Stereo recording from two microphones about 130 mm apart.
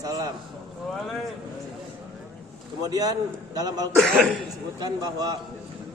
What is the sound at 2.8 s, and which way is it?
A man's voice, 30° right (ahead or behind).